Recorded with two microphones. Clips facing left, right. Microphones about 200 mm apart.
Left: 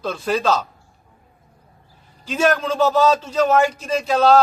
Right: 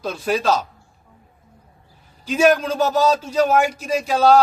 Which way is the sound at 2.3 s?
10° right (ahead or behind).